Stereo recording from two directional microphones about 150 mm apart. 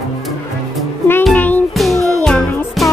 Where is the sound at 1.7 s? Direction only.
Centre (ahead or behind).